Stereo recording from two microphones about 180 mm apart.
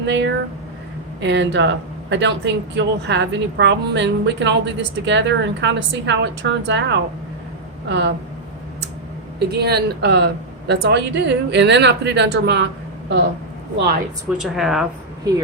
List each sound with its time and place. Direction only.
0.0 s speech: 80° right
9.4 s speech: 65° right (ahead or behind)
14.3 s a woman's voice: centre (ahead or behind)